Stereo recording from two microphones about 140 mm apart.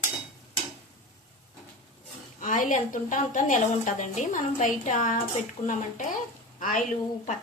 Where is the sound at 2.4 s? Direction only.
70° left (ahead or behind).